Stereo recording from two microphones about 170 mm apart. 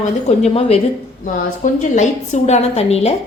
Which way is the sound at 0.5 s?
35° left (ahead or behind).